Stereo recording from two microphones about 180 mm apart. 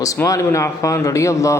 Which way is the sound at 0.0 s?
20° left (ahead or behind).